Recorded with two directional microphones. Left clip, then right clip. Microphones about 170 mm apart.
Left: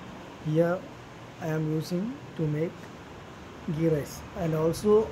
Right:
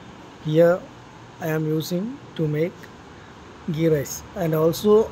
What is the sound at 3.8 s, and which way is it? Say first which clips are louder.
Speech: right 6 dB; 25° right (ahead or behind).